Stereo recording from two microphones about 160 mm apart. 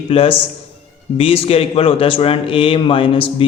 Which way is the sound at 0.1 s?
35° left (ahead or behind).